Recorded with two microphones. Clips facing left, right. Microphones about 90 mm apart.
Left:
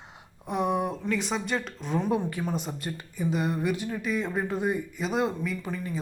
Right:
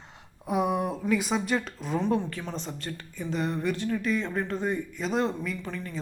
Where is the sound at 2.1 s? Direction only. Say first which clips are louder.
Left 1 dB; 15° left (ahead or behind).